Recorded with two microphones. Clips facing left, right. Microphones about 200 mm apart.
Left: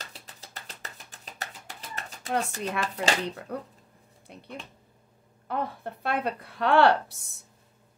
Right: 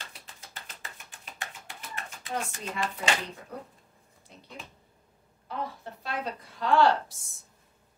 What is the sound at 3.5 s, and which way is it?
Speech, 65° left (ahead or behind).